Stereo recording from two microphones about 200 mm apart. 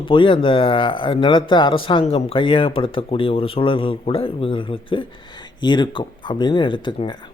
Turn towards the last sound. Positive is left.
turn(degrees=25)  # may be behind; listen again after turning